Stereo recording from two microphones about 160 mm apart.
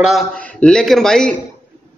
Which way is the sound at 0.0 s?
Centre (ahead or behind).